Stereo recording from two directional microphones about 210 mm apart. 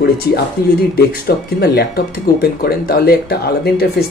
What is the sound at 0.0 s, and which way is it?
Speech, 50° left (ahead or behind).